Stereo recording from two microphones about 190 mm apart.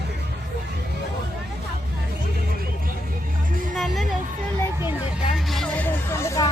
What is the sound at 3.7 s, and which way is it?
Music, centre (ahead or behind).